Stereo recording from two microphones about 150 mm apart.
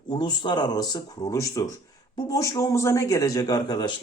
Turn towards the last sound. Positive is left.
turn(degrees=30)  # may be behind; listen again after turning